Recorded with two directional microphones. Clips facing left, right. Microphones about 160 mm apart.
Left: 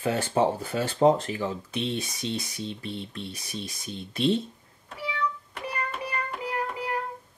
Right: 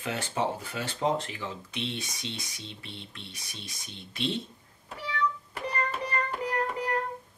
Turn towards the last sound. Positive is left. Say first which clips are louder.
# right 1 dB
turn(degrees=5)  # may be behind; listen again after turning